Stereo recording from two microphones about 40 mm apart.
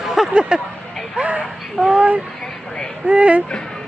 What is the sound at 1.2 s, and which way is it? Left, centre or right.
Speech, right.